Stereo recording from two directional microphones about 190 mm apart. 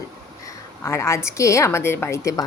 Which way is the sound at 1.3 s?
15° left (ahead or behind).